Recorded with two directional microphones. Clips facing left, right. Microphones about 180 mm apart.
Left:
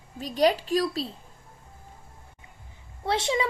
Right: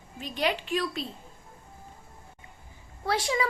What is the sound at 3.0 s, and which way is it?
Speech, 25° left (ahead or behind).